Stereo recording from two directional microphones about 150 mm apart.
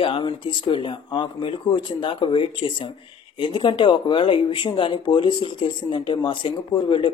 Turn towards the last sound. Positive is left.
turn(degrees=35)  # may be behind; listen again after turning